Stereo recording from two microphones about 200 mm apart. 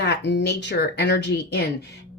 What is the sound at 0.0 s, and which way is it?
A woman's voice, 60° left (ahead or behind).